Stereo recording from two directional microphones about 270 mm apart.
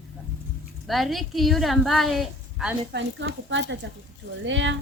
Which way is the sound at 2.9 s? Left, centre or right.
Right.